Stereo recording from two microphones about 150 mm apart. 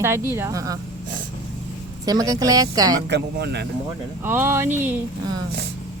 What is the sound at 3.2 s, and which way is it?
Speech, 90° right.